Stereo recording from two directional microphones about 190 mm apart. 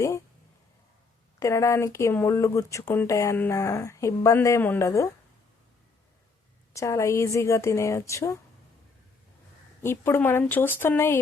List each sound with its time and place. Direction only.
1.4 s speech: 15° left (ahead or behind)
6.7 s speech: 15° left (ahead or behind)
9.8 s speech: 15° left (ahead or behind)